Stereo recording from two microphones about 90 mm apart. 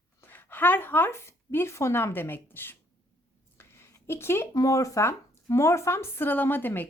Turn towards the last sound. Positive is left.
turn(degrees=20)  # may be behind; listen again after turning